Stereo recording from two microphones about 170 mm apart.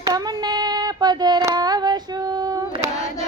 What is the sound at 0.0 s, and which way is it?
Female singing, 20° right (ahead or behind).